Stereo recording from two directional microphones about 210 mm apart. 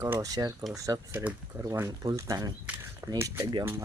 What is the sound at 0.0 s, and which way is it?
Speech, 15° right (ahead or behind).